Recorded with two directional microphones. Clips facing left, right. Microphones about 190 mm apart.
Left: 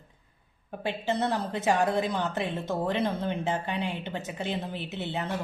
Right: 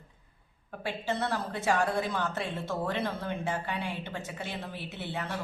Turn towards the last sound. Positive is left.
turn(degrees=20)  # may be behind; listen again after turning